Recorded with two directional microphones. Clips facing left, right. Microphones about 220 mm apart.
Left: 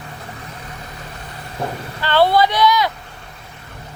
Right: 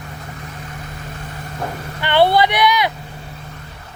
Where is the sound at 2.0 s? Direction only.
20° right (ahead or behind).